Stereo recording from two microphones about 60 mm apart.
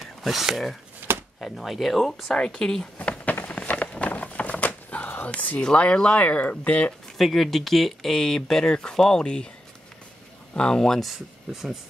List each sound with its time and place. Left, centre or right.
0.0 s speech: centre
3.0 s a sound: left
5.6 s speech: centre
7.2 s speech: centre
10.5 s speech: centre